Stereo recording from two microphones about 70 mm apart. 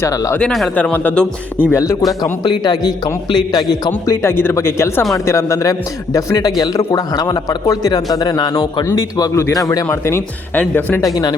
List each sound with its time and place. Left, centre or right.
0.8 s speech: left
1.7 s speech: left
2.4 s a man's voice: left
4.1 s speech: left
6.1 s a man's voice: left
10.5 s speech: left
11.0 s a man's voice: left